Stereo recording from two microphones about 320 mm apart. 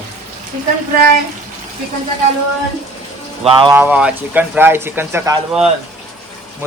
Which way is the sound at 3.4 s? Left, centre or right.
Centre.